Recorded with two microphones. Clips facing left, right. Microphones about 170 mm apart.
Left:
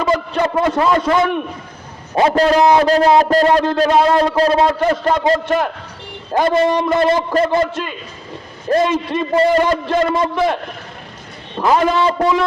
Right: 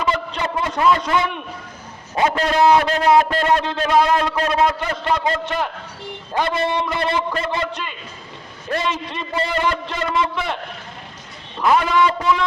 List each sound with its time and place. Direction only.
0.0 s a sound: 40° left (ahead or behind)
0.9 s a man's voice: 45° left (ahead or behind)
8.7 s a man's voice: 50° left (ahead or behind)
11.6 s a man's voice: 30° left (ahead or behind)